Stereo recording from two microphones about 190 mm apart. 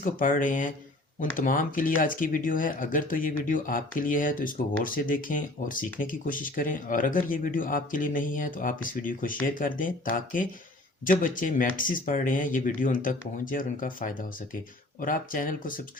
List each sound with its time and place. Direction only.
0.0 s speech: 45° left (ahead or behind)